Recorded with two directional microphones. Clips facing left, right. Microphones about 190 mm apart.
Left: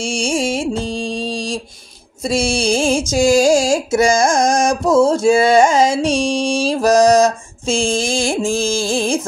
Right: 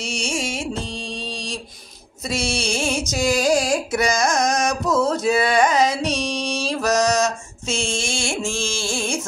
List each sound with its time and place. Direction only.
0.0 s music: 30° left (ahead or behind)
2.8 s carnatic music: 30° left (ahead or behind)